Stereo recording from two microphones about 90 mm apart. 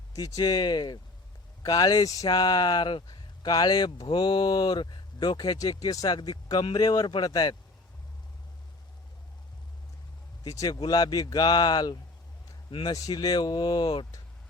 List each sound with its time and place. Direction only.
0.1 s speech: 40° left (ahead or behind)
4.0 s speech: 60° left (ahead or behind)
10.4 s speech: 45° left (ahead or behind)